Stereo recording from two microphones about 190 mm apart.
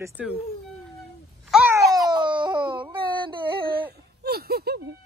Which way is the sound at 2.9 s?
25° right (ahead or behind).